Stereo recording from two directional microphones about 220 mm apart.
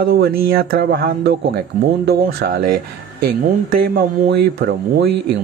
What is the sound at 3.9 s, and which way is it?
Speech, 45° right (ahead or behind).